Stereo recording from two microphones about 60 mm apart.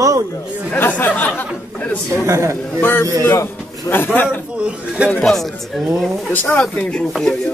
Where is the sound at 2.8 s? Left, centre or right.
Left.